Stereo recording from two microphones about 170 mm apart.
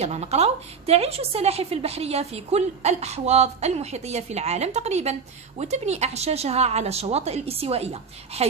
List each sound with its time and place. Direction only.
0.0 s a woman's voice: 40° right (ahead or behind)